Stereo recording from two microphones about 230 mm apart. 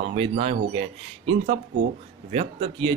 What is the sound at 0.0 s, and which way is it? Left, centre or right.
Speech, right.